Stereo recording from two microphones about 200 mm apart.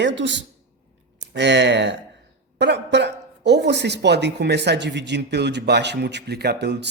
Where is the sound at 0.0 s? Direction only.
60° right (ahead or behind).